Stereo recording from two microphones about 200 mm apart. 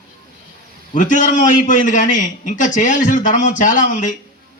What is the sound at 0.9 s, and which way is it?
A man's voice, 40° left (ahead or behind).